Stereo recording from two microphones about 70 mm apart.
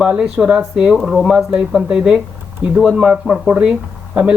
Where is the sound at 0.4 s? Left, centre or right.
Centre.